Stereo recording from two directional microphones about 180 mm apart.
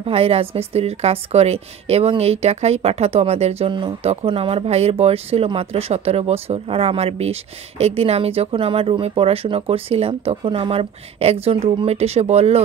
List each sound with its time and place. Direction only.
0.0 s a woman's voice: 35° right (ahead or behind)